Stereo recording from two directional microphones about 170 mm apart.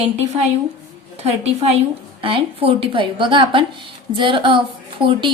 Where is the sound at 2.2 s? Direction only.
30° right (ahead or behind).